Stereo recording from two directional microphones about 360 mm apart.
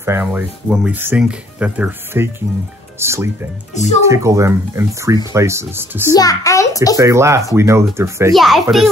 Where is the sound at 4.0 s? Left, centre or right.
Centre.